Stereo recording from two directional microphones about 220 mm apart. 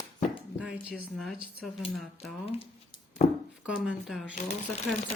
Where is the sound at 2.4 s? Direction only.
25° left (ahead or behind).